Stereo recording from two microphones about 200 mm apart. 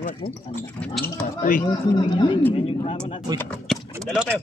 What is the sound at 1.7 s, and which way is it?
Speech, 25° left (ahead or behind).